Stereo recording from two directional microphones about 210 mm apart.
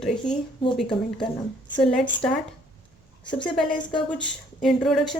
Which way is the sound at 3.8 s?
20° left (ahead or behind).